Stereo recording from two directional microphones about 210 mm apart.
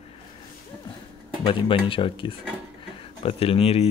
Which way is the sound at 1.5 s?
25° left (ahead or behind).